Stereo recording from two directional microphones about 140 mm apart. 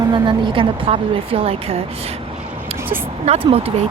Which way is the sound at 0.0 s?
35° right (ahead or behind).